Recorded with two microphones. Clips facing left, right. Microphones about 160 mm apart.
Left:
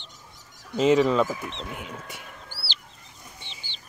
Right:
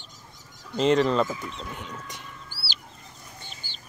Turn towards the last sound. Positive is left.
turn(degrees=-45)  # may be behind; listen again after turning